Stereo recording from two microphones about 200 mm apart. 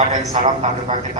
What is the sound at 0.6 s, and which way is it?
Speech, 35° right (ahead or behind).